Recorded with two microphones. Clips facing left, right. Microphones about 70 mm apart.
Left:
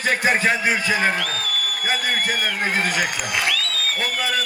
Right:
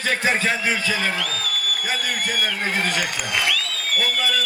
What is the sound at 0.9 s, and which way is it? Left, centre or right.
A man's voice, left.